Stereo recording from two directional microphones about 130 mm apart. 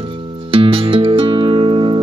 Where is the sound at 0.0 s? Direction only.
40° right (ahead or behind).